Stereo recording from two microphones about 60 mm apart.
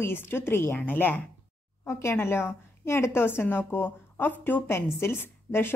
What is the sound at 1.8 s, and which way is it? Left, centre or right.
A woman's voice, left.